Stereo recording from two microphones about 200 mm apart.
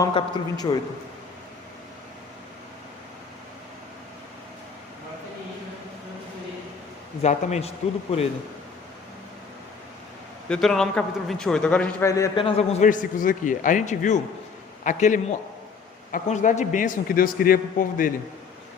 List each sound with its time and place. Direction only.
0.0 s a man's voice: 20° left (ahead or behind)
7.2 s a man's voice: 35° left (ahead or behind)
10.5 s a man's voice: 5° left (ahead or behind)
12.5 s a man's voice: 35° left (ahead or behind)